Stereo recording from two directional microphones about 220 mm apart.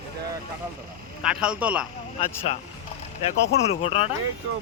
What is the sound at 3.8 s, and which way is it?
Speech, 25° left (ahead or behind).